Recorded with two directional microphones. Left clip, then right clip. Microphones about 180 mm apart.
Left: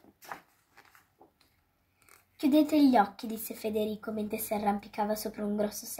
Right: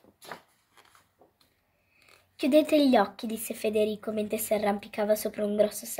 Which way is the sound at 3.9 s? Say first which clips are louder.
Right 5 dB; 50° right (ahead or behind).